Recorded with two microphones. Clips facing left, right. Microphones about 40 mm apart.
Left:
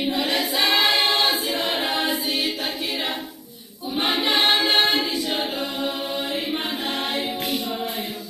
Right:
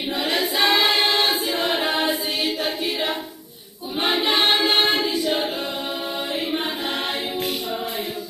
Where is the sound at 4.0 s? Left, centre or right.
Right.